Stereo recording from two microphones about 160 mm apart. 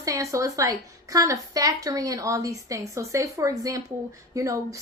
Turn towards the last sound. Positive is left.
turn(degrees=-20)  # may be behind; listen again after turning